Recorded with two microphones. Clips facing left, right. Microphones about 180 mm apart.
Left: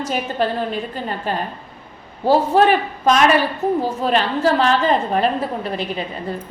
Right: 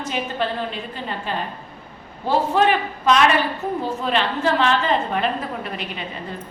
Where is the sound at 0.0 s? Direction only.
45° left (ahead or behind).